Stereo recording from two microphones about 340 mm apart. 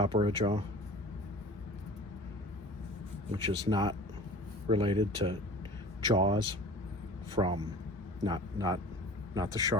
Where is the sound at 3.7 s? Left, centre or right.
Centre.